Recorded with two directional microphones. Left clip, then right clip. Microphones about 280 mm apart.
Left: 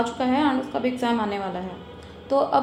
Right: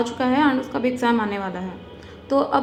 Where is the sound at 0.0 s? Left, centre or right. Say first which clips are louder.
Right 3 dB; centre.